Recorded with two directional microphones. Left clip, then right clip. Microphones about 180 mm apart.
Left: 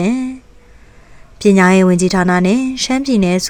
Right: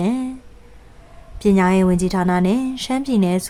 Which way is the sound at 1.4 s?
25° left (ahead or behind).